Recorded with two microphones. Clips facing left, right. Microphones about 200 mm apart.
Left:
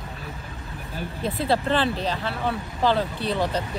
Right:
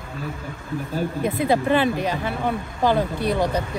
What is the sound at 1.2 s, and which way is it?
Speech, 15° right (ahead or behind).